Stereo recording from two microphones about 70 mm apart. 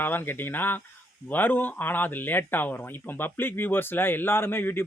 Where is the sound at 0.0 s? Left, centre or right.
Left.